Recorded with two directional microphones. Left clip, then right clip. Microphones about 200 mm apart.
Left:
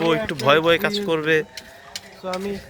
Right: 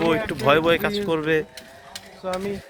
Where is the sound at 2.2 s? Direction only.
60° left (ahead or behind).